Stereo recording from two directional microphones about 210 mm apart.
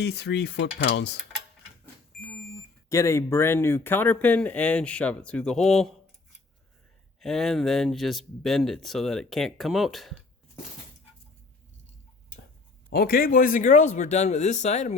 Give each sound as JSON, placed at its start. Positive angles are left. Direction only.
{"t": 0.0, "sound": "cutlery", "side_deg": 55}
{"t": 2.9, "sound": "speech", "side_deg": 15}
{"t": 7.2, "sound": "speech", "side_deg": 0}
{"t": 12.9, "sound": "speech", "side_deg": 45}